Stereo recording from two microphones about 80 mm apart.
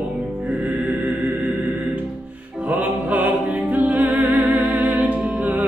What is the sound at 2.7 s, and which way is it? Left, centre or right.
Music, right.